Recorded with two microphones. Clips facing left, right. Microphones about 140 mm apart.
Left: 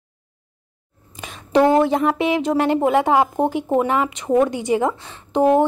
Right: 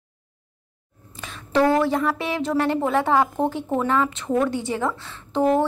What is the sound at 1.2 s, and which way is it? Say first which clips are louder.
A woman's voice: left 4 dB; 15° left (ahead or behind).